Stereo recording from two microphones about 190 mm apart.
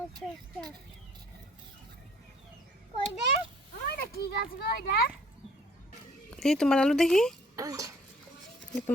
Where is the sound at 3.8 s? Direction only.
50° left (ahead or behind).